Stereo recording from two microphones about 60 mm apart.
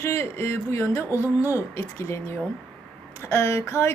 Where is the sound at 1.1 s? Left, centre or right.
Right.